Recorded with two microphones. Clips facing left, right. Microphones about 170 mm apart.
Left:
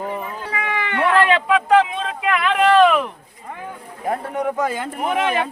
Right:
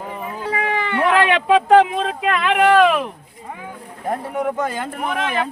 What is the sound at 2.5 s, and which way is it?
Speech, 15° right (ahead or behind).